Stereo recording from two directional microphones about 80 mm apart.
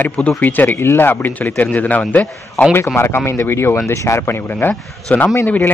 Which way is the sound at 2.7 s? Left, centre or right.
Left.